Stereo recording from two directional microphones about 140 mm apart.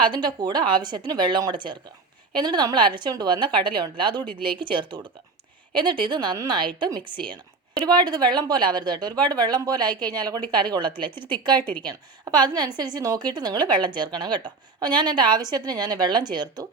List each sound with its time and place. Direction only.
0.0 s a woman's voice: 30° right (ahead or behind)
11.6 s a woman's voice: 10° left (ahead or behind)
11.9 s a woman's voice: 30° right (ahead or behind)